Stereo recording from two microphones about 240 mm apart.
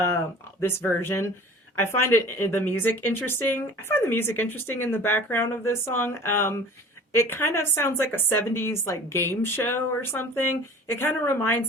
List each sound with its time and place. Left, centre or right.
0.6 s speech: centre
10.2 s speech: left
10.8 s speech: centre